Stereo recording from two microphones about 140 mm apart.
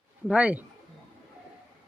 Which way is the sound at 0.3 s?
10° right (ahead or behind).